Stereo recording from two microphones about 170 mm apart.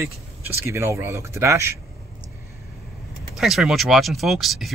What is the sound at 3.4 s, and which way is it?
Speech, centre (ahead or behind).